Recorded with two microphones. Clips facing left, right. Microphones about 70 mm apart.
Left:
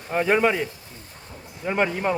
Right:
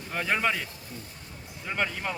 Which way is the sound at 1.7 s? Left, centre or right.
Left.